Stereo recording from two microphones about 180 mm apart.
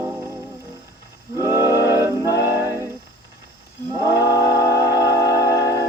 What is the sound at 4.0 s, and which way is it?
Music, 15° right (ahead or behind).